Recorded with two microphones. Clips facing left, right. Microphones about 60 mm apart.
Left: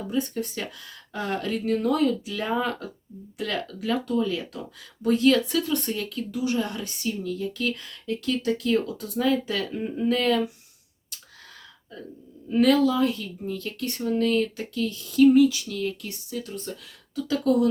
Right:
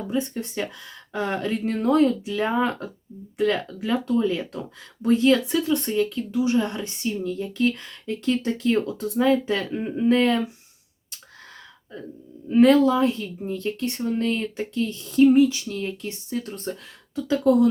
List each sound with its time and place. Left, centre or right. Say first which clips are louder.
0.1 s speech: even; right
12.5 s speech: right 4 dB; right
16.4 s speech: right 3 dB; right
17.2 s speech: right 4 dB; right